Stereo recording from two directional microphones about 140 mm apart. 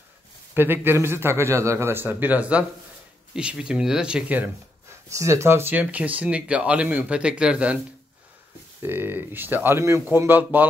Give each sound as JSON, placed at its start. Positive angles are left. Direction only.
{"t": 0.6, "sound": "speech", "side_deg": -15}
{"t": 5.1, "sound": "speech", "side_deg": -20}
{"t": 8.8, "sound": "speech", "side_deg": -15}